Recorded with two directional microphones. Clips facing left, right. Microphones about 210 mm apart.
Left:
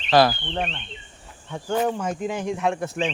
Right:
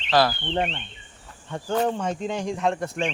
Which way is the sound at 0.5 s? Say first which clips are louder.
Right 2 dB; 20° right (ahead or behind).